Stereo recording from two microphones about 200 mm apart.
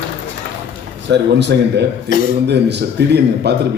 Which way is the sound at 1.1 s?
60° right (ahead or behind).